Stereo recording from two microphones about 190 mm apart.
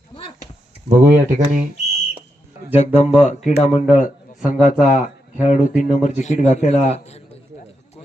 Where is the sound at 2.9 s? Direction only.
35° left (ahead or behind).